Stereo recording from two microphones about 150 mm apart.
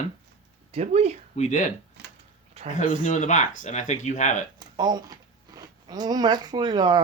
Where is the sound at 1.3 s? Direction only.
50° left (ahead or behind).